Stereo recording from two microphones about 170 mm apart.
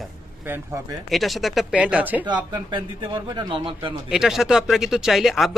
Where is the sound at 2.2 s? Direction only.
25° right (ahead or behind).